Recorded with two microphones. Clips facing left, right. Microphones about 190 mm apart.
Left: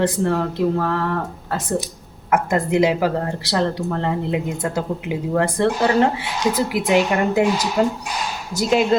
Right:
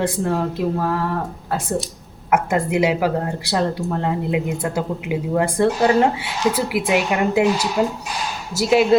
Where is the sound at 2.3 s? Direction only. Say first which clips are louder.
Even; 10° right (ahead or behind).